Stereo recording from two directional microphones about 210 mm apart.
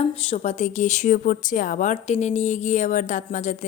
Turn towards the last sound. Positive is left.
turn(degrees=35)  # may be behind; listen again after turning